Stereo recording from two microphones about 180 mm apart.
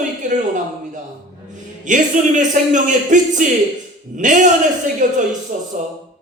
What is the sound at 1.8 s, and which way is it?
A man's voice, 45° right (ahead or behind).